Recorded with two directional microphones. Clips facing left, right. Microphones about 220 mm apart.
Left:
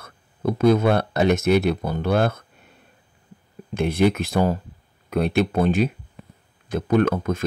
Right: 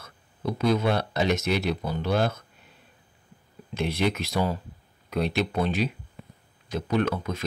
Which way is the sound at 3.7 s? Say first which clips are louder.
Left 7 dB; 50° left (ahead or behind).